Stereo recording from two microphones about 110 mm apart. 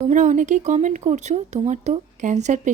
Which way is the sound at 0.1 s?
90° right.